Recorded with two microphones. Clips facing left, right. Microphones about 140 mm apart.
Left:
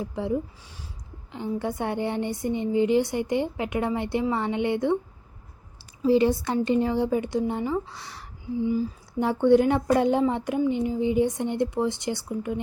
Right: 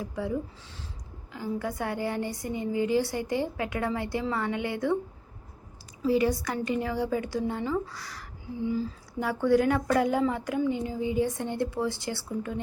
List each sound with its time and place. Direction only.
0.0 s a woman's voice: 25° left (ahead or behind)
6.1 s a woman's voice: 25° left (ahead or behind)
8.7 s a sound: 15° left (ahead or behind)
9.2 s a woman's voice: 25° left (ahead or behind)